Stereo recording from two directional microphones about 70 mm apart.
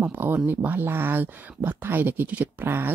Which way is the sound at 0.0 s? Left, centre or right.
Right.